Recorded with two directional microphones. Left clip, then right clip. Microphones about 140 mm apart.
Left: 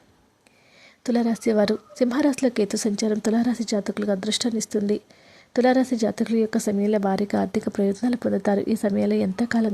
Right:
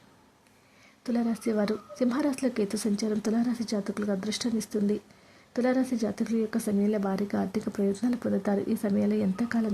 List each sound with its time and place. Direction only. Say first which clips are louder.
1.0 s speech: left 7 dB; 25° left (ahead or behind)